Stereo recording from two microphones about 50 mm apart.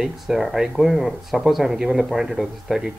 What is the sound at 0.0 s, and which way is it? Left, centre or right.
Speech, centre.